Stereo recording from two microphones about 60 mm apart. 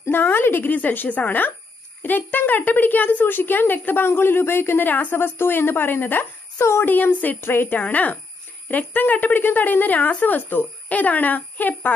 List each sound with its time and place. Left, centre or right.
0.1 s a woman's voice: left